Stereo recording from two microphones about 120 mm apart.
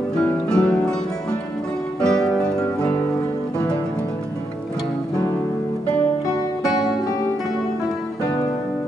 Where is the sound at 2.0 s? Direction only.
5° left (ahead or behind).